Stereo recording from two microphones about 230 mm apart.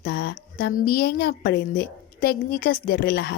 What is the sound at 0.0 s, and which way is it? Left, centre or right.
Speech, left.